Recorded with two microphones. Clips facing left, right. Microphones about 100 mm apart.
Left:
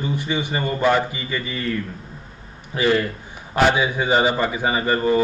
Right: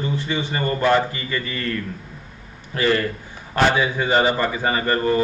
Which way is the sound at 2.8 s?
10° left (ahead or behind).